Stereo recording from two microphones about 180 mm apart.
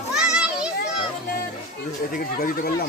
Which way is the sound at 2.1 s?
55° left (ahead or behind).